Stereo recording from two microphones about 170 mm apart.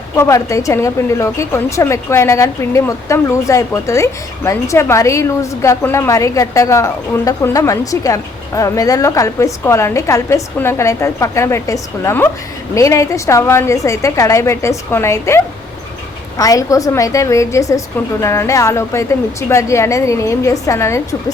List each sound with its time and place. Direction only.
0.2 s a woman's voice: 20° left (ahead or behind)
16.4 s a woman's voice: 20° left (ahead or behind)